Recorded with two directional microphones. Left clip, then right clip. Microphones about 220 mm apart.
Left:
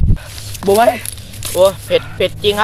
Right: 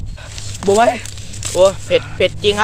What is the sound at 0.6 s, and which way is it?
Speech, 35° left (ahead or behind).